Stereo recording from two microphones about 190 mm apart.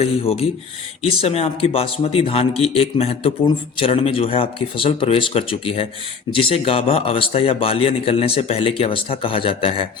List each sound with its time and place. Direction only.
0.0 s a man's voice: 30° left (ahead or behind)